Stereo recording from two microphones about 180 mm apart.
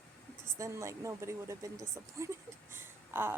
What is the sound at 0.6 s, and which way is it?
Speech, 15° right (ahead or behind).